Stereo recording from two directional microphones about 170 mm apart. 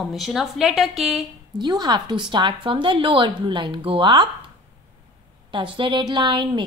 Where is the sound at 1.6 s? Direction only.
25° right (ahead or behind).